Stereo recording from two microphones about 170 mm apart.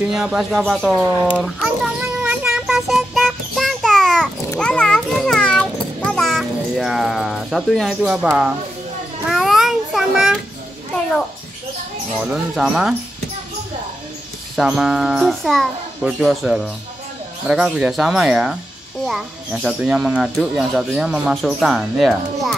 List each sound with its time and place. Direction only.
0.1 s a sound: 5° right (ahead or behind)
9.3 s child singing: centre (ahead or behind)
12.2 s speech: centre (ahead or behind)
14.5 s speech: 5° right (ahead or behind)